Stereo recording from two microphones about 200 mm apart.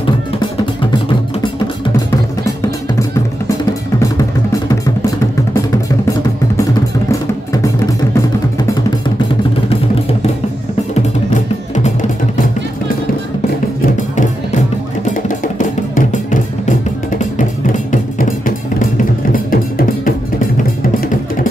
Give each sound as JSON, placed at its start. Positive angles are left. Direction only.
{"t": 11.2, "sound": "music", "side_deg": 40}
{"t": 15.0, "sound": "music", "side_deg": 40}